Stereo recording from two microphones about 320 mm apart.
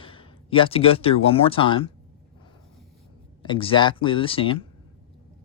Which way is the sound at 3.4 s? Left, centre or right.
Centre.